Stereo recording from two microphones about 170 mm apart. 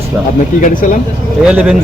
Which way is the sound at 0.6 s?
50° left (ahead or behind).